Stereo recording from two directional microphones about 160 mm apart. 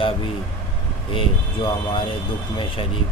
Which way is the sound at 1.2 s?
30° left (ahead or behind).